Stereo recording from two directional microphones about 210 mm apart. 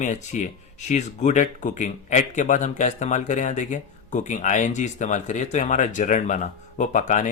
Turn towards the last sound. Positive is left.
turn(degrees=35)  # may be behind; listen again after turning